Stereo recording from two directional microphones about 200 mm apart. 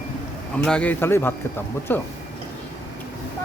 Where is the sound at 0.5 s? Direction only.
5° left (ahead or behind).